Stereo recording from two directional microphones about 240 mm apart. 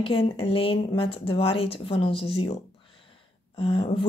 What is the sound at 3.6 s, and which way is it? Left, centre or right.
Speech, left.